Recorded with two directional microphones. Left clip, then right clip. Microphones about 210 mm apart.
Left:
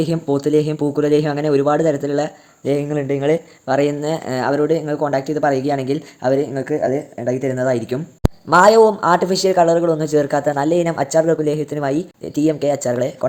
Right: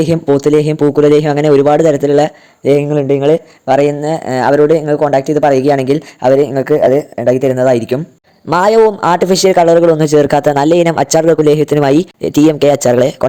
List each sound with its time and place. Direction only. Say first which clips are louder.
0.0 s a man's voice: right 8 dB; 30° right (ahead or behind)